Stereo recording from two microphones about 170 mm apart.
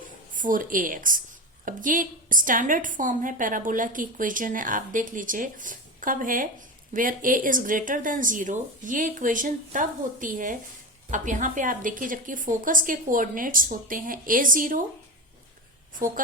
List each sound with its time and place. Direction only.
0.3 s a woman's voice: 50° right (ahead or behind)
16.0 s a woman's voice: 55° right (ahead or behind)